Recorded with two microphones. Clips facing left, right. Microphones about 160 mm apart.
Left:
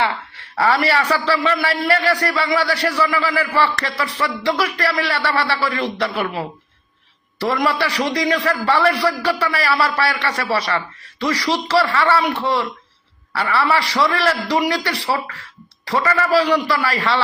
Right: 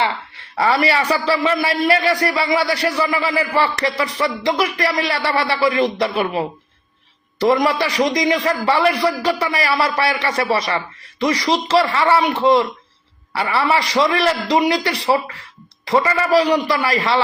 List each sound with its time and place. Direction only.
0.5 s a man's voice: 15° right (ahead or behind)